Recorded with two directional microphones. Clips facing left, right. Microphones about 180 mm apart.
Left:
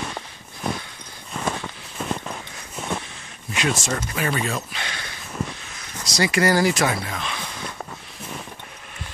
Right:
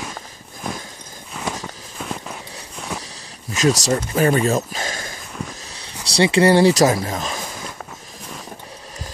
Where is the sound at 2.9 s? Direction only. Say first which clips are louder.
Left 1 dB; 35° right (ahead or behind).